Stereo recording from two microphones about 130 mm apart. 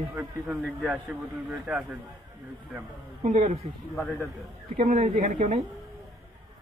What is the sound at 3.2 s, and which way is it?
Speech, 70° right (ahead or behind).